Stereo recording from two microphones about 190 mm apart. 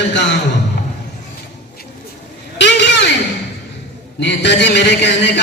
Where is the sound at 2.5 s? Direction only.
65° left (ahead or behind).